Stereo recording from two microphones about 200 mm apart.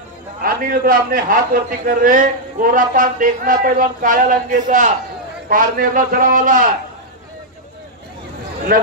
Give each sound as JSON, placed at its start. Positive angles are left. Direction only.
{"t": 0.4, "sound": "a man's voice", "side_deg": -45}